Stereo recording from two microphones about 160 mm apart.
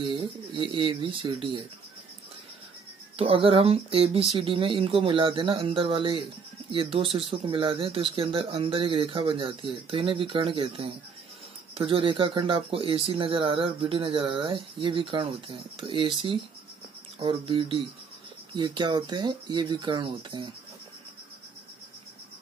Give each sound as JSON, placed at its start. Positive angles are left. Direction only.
{"t": 0.0, "sound": "speech", "side_deg": -30}
{"t": 3.2, "sound": "speech", "side_deg": -35}
{"t": 17.2, "sound": "speech", "side_deg": -30}